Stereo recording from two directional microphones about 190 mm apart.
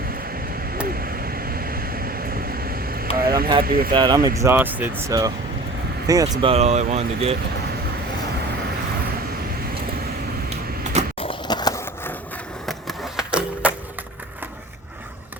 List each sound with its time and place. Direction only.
0.9 s vehicle: 50° right (ahead or behind)
3.6 s speech: 50° right (ahead or behind)
3.9 s speech: 20° right (ahead or behind)
6.5 s speech: 35° right (ahead or behind)
11.2 s skateboard: 25° left (ahead or behind)
12.6 s skateboard: centre (ahead or behind)